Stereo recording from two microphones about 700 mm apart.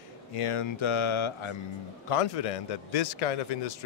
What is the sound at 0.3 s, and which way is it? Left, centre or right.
A man's voice, left.